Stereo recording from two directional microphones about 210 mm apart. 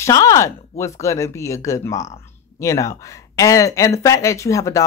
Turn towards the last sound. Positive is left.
turn(degrees=15)  # may be behind; listen again after turning